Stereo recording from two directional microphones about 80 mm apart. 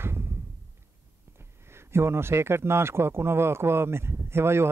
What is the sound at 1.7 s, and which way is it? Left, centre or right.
Speech, right.